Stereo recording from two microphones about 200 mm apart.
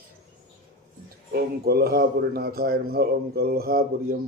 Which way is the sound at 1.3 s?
50° right (ahead or behind).